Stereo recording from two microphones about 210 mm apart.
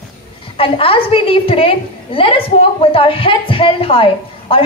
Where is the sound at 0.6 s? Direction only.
25° left (ahead or behind).